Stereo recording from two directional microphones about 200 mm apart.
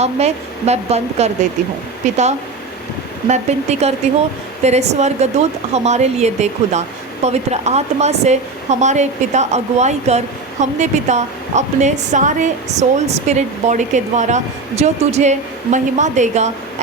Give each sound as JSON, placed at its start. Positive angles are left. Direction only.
{"t": 0.0, "sound": "speech", "side_deg": -30}
{"t": 3.2, "sound": "speech", "side_deg": -35}